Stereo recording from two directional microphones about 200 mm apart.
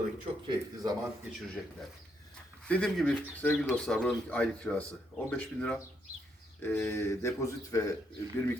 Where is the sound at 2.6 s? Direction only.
5° left (ahead or behind).